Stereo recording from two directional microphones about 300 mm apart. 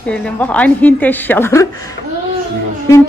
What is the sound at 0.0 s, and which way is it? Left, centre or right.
A woman's voice, centre.